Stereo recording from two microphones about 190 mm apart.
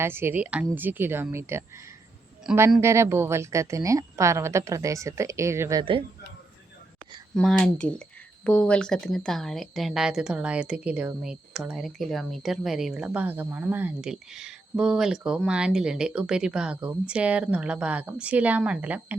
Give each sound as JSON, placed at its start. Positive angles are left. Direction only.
{"t": 0.0, "sound": "a woman's voice", "side_deg": -10}
{"t": 7.3, "sound": "speech", "side_deg": 5}